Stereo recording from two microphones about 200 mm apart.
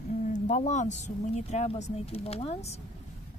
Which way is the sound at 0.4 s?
35° left (ahead or behind).